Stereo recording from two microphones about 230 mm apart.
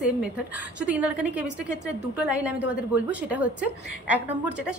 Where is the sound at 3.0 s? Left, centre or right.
Centre.